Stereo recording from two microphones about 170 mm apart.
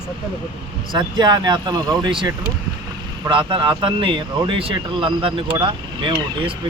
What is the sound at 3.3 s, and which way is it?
Speech, 30° right (ahead or behind).